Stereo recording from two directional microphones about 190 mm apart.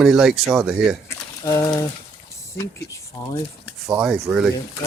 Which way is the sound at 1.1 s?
20° left (ahead or behind).